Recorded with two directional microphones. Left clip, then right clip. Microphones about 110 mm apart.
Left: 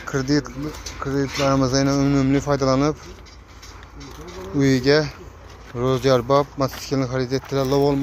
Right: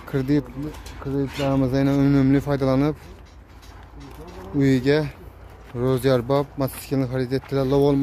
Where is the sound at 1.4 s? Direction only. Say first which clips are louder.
Left 3 dB; 15° right (ahead or behind).